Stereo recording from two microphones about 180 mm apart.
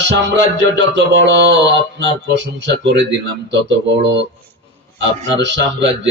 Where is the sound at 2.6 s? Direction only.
80° right.